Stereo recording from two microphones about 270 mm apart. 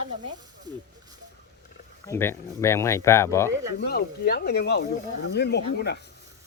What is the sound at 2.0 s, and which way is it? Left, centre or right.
Speech, centre.